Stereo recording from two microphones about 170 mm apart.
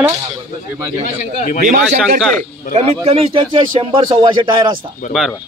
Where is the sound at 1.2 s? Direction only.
50° left (ahead or behind).